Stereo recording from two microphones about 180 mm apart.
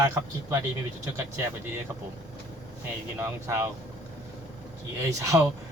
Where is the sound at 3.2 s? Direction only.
15° right (ahead or behind).